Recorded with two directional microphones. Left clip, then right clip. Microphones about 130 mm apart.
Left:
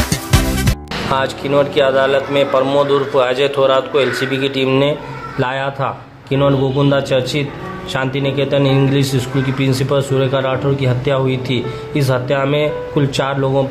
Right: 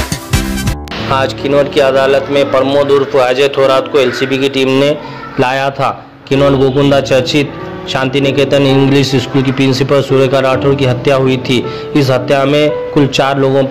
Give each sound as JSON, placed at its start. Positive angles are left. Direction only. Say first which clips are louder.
{"t": 1.1, "sound": "a man's voice", "louder": "right 4 dB", "side_deg": -35}
{"t": 2.6, "sound": "a man's voice", "louder": "right 4 dB", "side_deg": -20}
{"t": 3.2, "sound": "a man's voice", "louder": "right 3 dB", "side_deg": -30}